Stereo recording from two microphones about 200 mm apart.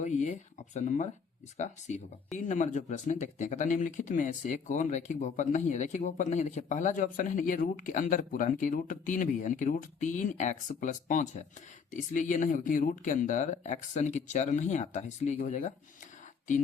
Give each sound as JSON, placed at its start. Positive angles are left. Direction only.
{"t": 0.0, "sound": "speech", "side_deg": 35}